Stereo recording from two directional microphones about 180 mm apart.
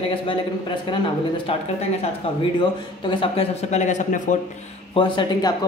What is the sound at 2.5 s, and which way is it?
A man's voice, 25° left (ahead or behind).